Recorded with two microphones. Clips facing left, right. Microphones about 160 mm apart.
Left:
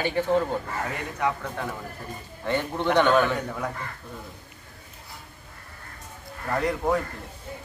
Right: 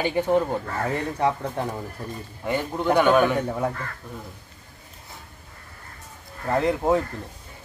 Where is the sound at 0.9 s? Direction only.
35° right (ahead or behind).